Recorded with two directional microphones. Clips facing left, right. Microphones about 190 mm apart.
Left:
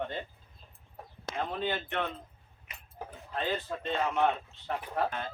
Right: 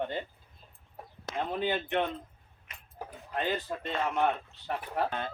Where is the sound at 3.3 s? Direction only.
15° right (ahead or behind).